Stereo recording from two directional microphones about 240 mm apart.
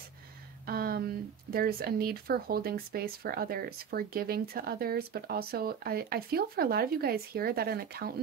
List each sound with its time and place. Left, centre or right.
0.7 s speech: right